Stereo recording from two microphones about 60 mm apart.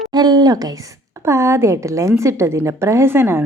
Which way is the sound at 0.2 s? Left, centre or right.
Right.